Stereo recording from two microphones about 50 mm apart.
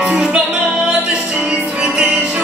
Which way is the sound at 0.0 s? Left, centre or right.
Centre.